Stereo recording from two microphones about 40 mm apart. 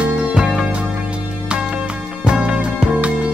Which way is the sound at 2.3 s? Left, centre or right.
Right.